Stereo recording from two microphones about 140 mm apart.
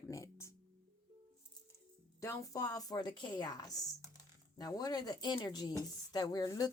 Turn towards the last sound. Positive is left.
turn(degrees=25)  # may be behind; listen again after turning